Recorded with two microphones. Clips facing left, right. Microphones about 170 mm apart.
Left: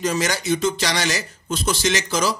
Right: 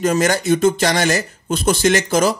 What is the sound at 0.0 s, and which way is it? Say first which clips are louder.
Speech: right 6 dB; 50° right (ahead or behind).